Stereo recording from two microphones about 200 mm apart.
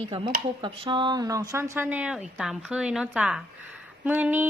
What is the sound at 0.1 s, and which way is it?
A woman's voice, 25° right (ahead or behind).